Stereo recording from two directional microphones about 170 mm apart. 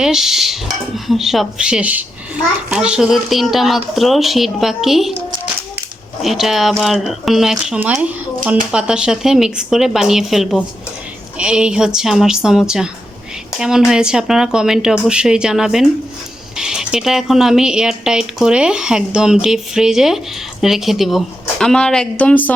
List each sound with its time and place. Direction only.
0.0 s speech: centre (ahead or behind)
6.2 s speech: centre (ahead or behind)